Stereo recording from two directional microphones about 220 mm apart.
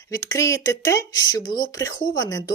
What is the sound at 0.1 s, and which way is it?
Speech, 15° left (ahead or behind).